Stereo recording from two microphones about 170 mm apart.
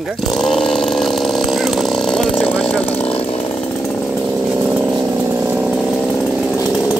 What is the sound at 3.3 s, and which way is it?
Chainsaw, 5° left (ahead or behind).